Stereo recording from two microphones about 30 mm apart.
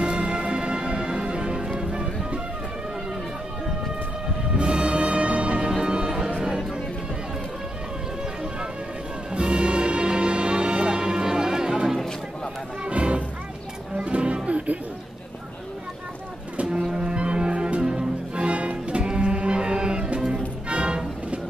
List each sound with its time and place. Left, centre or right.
0.0 s music: right
4.6 s music: right
9.3 s music: right
12.9 s music: right
16.6 s music: right
20.6 s music: right